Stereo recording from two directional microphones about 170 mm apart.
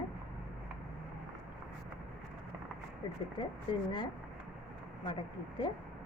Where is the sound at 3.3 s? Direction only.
25° left (ahead or behind).